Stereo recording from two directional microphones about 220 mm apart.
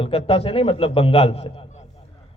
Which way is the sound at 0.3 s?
25° left (ahead or behind).